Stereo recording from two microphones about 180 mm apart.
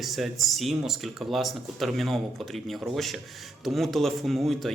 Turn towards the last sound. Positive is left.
turn(degrees=0)  # may be behind; listen again after turning